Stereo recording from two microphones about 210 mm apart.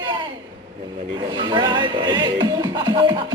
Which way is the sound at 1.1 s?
20° right (ahead or behind).